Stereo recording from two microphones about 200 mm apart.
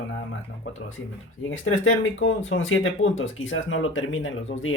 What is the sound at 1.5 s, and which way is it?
Speech, 80° left.